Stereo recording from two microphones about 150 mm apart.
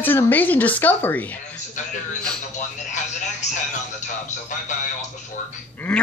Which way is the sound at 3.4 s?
50° left (ahead or behind).